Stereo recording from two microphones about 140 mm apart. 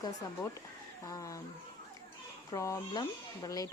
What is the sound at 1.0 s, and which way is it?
Speech, 25° left (ahead or behind).